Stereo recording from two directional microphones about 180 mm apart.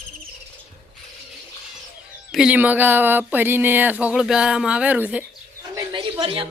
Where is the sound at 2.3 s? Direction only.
5° right (ahead or behind).